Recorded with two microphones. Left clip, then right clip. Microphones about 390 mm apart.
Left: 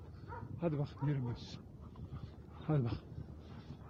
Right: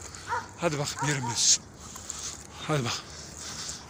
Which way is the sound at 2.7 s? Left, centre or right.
Left.